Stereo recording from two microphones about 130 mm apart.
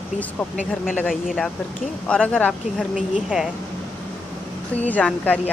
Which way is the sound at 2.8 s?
5° right (ahead or behind).